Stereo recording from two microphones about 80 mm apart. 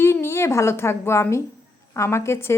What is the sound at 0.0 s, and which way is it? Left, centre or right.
A child's voice, left.